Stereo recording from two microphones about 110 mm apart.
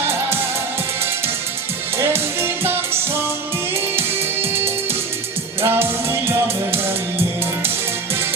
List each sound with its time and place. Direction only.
2.0 s music: 20° right (ahead or behind)
5.6 s music: 20° right (ahead or behind)